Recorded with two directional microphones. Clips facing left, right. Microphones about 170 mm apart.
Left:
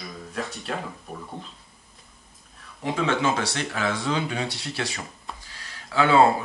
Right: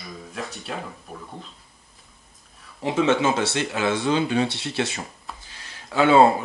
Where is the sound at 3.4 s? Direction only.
25° right (ahead or behind).